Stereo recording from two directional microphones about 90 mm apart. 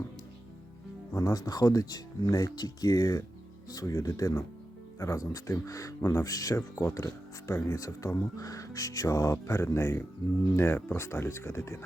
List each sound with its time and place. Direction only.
1.1 s speech: 40° left (ahead or behind)